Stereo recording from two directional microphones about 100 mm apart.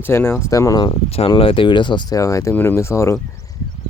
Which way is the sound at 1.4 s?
65° left (ahead or behind).